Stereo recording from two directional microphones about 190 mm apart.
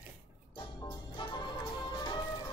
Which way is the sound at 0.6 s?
25° left (ahead or behind).